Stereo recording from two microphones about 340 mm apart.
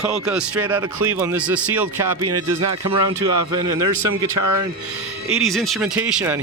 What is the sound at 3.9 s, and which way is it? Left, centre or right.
Speech, right.